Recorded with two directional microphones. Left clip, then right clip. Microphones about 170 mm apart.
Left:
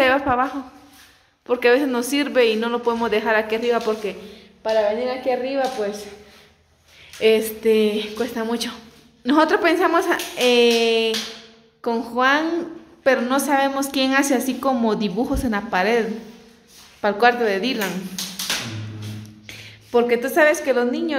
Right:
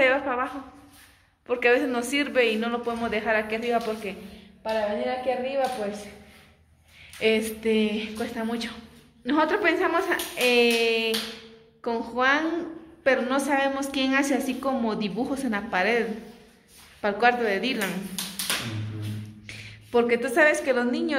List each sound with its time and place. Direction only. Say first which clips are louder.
0.0 s a sound: left 5 dB; 30° left (ahead or behind)
1.5 s a woman's voice: left 5 dB; 25° left (ahead or behind)
7.2 s a woman's voice: left 6 dB; 20° left (ahead or behind)
19.4 s a woman's voice: left 3 dB; 15° left (ahead or behind)